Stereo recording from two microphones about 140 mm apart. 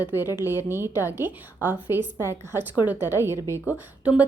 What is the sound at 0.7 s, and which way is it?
A woman's voice, 15° right (ahead or behind).